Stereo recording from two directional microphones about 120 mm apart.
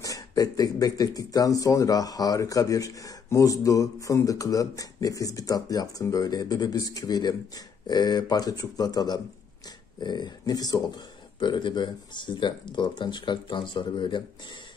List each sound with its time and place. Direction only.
0.0 s speech: 30° left (ahead or behind)